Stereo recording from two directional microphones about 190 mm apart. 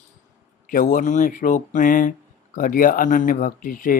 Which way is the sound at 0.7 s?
45° left (ahead or behind).